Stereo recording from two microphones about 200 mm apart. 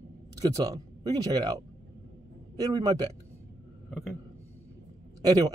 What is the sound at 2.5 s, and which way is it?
Speech, 20° right (ahead or behind).